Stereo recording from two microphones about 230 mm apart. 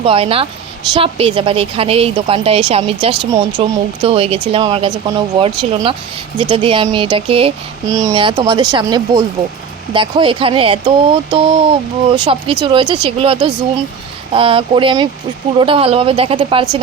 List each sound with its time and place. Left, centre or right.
0.0 s speech: right